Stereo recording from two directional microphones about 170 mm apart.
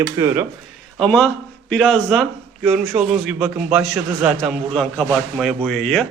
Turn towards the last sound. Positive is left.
turn(degrees=0)  # may be behind; listen again after turning